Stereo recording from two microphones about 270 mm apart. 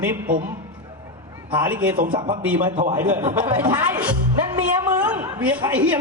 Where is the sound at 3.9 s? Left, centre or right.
Centre.